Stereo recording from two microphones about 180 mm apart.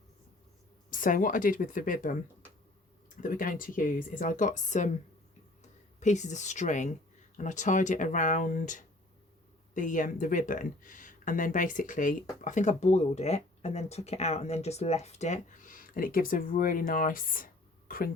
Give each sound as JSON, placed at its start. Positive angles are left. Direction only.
{"t": 0.9, "sound": "speech", "side_deg": 50}
{"t": 3.2, "sound": "speech", "side_deg": 50}
{"t": 6.0, "sound": "speech", "side_deg": 40}